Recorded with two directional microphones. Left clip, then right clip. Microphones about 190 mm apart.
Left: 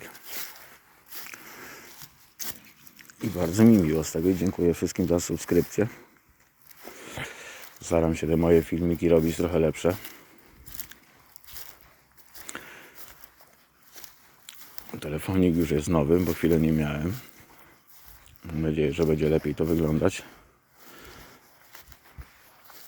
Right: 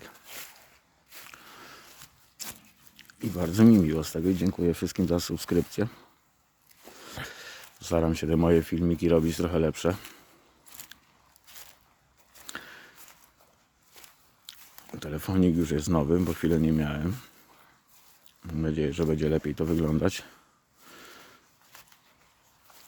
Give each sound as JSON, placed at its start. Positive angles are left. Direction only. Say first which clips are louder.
{"t": 1.3, "sound": "sniff", "louder": "left 5 dB", "side_deg": 0}
{"t": 3.5, "sound": "speech", "louder": "left 1 dB", "side_deg": -15}
{"t": 7.0, "sound": "speech", "louder": "left 2 dB", "side_deg": 0}
{"t": 10.8, "sound": "a sound", "louder": "left 2 dB", "side_deg": 50}
{"t": 11.4, "sound": "boat", "louder": "left 3 dB", "side_deg": 50}
{"t": 12.5, "sound": "a sound", "louder": "left 1 dB", "side_deg": -10}
{"t": 14.9, "sound": "speech", "louder": "left 2 dB", "side_deg": -5}
{"t": 18.4, "sound": "speech", "louder": "left 3 dB", "side_deg": -10}
{"t": 20.9, "sound": "a sound", "louder": "left 1 dB", "side_deg": -20}